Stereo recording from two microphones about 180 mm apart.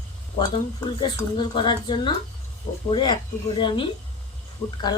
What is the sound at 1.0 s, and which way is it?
A woman's voice, 25° left (ahead or behind).